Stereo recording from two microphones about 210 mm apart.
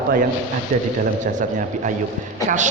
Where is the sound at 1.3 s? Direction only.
35° right (ahead or behind).